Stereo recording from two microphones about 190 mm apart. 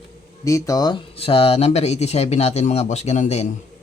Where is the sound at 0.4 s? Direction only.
15° left (ahead or behind); by 3.4 s 35° left (ahead or behind).